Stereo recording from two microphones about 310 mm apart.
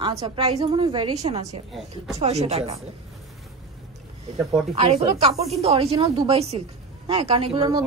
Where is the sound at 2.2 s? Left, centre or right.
Right.